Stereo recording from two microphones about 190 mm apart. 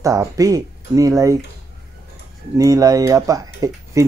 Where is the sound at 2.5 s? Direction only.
15° right (ahead or behind).